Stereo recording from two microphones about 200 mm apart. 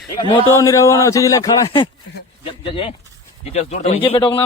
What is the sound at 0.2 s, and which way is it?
A man's voice, 25° left (ahead or behind).